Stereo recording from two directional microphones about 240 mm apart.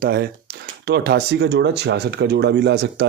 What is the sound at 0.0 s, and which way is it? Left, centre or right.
Speech, right.